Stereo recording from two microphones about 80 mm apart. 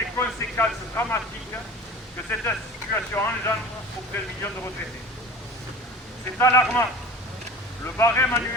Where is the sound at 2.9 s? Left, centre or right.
Left.